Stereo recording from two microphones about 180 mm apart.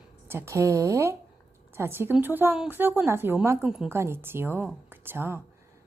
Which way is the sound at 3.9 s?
15° right (ahead or behind).